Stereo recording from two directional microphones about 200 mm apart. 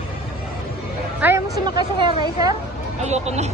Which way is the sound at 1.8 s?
20° right (ahead or behind).